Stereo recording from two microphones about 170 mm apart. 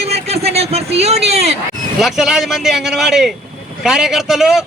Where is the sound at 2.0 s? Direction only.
Centre (ahead or behind).